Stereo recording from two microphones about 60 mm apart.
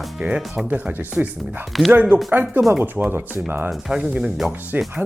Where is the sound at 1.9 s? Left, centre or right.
Right.